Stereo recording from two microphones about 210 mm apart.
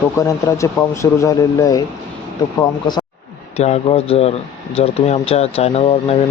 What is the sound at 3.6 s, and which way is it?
Speech, 30° left (ahead or behind).